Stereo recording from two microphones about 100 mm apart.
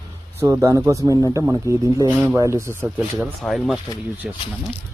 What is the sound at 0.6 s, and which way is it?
Speech, 30° right (ahead or behind).